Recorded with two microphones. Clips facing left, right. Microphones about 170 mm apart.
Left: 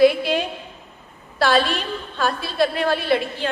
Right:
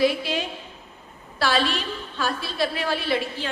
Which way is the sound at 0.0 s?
50° left (ahead or behind).